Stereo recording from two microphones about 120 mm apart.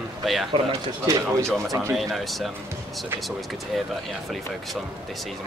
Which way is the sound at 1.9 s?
Centre (ahead or behind).